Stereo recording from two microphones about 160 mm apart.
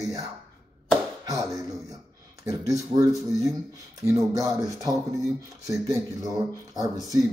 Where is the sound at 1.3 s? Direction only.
20° right (ahead or behind).